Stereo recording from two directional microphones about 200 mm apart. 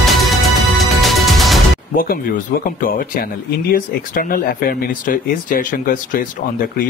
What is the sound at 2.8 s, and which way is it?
Speech, 45° left (ahead or behind).